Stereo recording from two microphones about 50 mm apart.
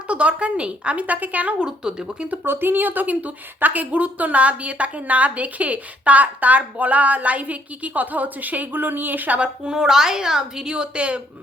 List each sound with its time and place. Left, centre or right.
0.1 s a woman's voice: right
1.5 s a woman's voice: centre
2.4 s a woman's voice: right
9.4 s a woman's voice: centre